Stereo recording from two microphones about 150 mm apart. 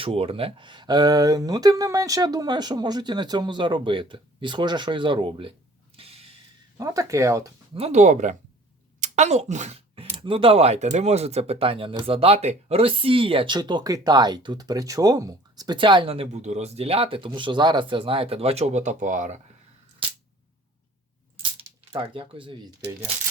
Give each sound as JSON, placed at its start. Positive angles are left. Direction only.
{"t": 0.0, "sound": "speech", "side_deg": -40}
{"t": 6.0, "sound": "snort", "side_deg": -40}
{"t": 6.7, "sound": "speech", "side_deg": -20}
{"t": 7.7, "sound": "speech", "side_deg": -45}
{"t": 21.9, "sound": "speech", "side_deg": -35}